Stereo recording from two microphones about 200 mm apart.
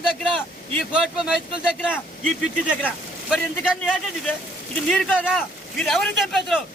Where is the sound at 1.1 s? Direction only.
5° right (ahead or behind).